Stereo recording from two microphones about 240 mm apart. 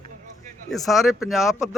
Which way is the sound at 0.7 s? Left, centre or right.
Centre.